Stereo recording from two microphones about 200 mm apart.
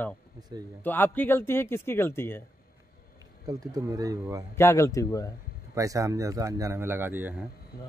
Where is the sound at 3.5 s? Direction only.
15° right (ahead or behind).